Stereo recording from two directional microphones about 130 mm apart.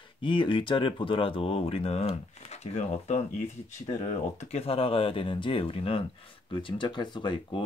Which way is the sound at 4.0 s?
55° left (ahead or behind).